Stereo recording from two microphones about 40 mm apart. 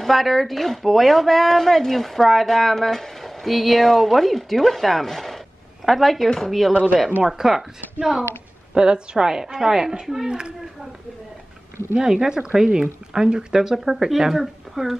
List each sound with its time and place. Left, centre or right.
0.0 s speech: centre
8.7 s a child's voice: right
12.0 s speech: centre